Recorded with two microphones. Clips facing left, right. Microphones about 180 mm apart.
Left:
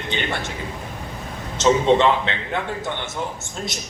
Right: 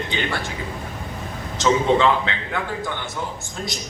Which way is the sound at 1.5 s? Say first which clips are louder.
Left 2 dB; 20° left (ahead or behind).